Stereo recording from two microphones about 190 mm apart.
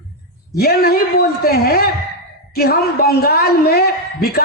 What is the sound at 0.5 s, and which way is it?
A man's voice, 55° left (ahead or behind).